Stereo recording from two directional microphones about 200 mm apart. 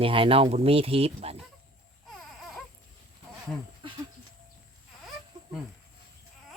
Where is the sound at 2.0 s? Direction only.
Centre (ahead or behind).